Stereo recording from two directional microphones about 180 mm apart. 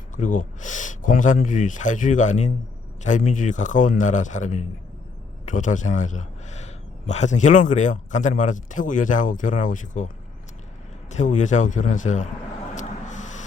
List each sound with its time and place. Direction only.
0.2 s speech: 45° left (ahead or behind)
11.1 s a man's voice: 40° left (ahead or behind)